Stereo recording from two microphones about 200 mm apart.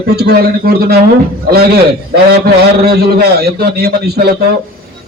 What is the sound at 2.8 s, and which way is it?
A man's voice, 50° right (ahead or behind).